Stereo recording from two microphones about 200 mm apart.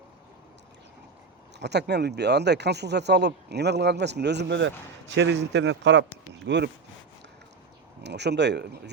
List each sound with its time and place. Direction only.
1.5 s speech: 60° right (ahead or behind)
8.0 s speech: 60° right (ahead or behind)